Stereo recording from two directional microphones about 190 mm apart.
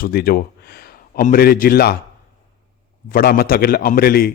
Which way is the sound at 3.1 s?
50° left (ahead or behind).